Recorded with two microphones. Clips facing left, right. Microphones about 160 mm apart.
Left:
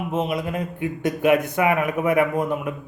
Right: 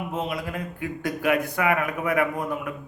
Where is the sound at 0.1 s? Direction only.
20° left (ahead or behind).